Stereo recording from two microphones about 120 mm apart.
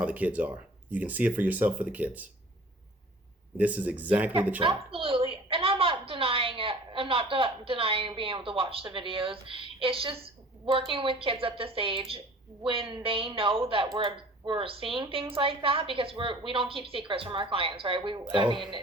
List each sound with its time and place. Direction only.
0.0 s speech: 15° right (ahead or behind)
3.6 s speech: 15° right (ahead or behind)
4.6 s a woman's voice: 50° right (ahead or behind)